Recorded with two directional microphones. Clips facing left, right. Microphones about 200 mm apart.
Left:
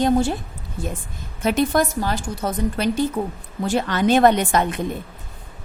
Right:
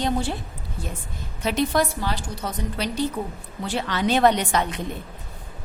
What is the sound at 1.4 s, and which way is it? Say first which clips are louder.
A woman's voice: left 3 dB; 50° left (ahead or behind).